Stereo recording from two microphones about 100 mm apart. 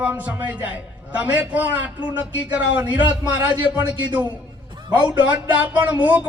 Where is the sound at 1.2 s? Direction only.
15° right (ahead or behind).